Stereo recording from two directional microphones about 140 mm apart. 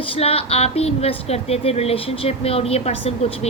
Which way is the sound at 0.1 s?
45° left (ahead or behind).